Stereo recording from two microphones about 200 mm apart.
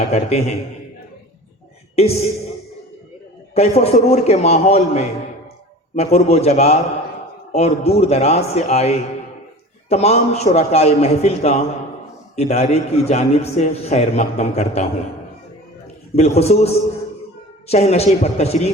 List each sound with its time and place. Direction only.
0.1 s a man's voice: 30° left (ahead or behind)
3.5 s a man's voice: 30° left (ahead or behind)
16.1 s a man's voice: 30° left (ahead or behind)